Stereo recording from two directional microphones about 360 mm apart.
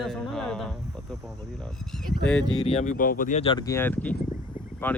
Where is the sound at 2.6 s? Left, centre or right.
Centre.